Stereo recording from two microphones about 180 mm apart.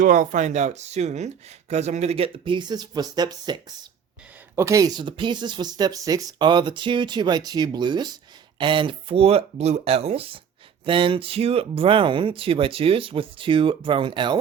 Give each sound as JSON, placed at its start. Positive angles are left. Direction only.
{"t": 0.0, "sound": "speech", "side_deg": -45}